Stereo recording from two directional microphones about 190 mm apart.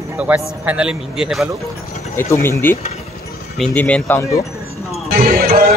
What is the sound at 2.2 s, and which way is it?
Speech, 15° left (ahead or behind).